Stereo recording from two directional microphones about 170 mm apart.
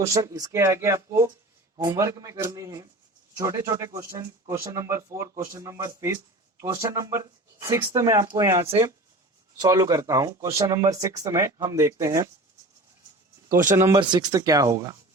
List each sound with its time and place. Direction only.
0.0 s speech: 20° right (ahead or behind)
13.7 s speech: 15° right (ahead or behind)